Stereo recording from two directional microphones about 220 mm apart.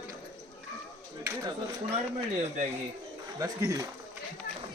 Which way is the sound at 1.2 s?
15° right (ahead or behind).